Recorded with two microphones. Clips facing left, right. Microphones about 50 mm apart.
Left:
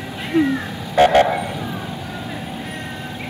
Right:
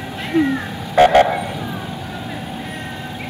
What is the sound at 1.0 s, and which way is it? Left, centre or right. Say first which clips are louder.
Vehicle: right 2 dB; right.